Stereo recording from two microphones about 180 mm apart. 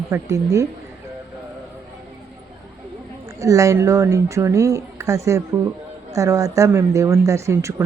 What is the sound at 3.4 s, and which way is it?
Speech, 15° right (ahead or behind).